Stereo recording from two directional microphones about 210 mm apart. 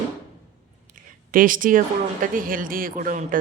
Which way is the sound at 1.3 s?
40° right (ahead or behind).